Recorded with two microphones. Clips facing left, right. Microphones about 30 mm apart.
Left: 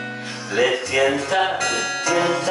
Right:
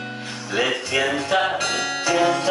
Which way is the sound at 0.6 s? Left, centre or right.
Centre.